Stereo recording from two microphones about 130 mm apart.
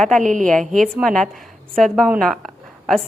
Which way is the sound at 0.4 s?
5° left (ahead or behind).